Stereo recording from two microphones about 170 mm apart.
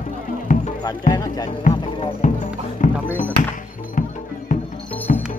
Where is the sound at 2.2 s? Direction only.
50° left (ahead or behind).